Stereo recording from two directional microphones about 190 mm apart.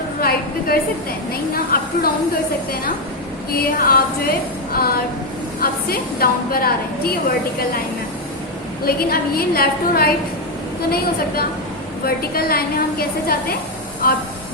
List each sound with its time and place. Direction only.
0.2 s a sound: 50° left (ahead or behind)
1.3 s a woman's voice: 50° left (ahead or behind)
3.5 s a woman's voice: 50° left (ahead or behind)
8.8 s a woman's voice: 50° left (ahead or behind)